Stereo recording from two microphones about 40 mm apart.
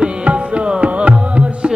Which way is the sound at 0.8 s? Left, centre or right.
Right.